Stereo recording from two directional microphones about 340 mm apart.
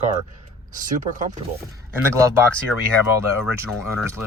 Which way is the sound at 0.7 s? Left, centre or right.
Right.